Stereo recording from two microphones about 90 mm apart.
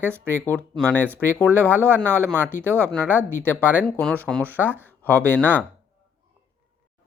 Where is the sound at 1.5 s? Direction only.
20° right (ahead or behind).